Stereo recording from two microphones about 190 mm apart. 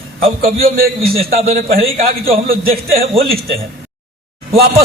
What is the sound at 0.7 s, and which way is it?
Speech, 50° right (ahead or behind).